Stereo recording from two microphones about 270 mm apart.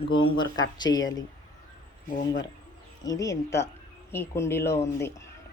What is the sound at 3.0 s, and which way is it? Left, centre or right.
Speech, centre.